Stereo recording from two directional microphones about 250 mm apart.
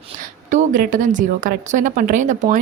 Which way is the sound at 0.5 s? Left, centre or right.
Right.